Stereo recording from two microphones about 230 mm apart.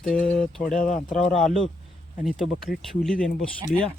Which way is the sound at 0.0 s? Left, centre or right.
Centre.